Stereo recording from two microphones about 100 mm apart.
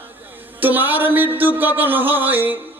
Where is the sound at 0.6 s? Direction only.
20° right (ahead or behind).